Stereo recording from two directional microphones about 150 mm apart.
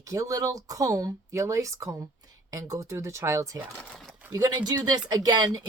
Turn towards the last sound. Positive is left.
turn(degrees=-25)  # may be behind; listen again after turning